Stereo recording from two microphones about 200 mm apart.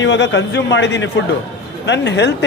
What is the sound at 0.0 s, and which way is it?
Speech, 65° left (ahead or behind).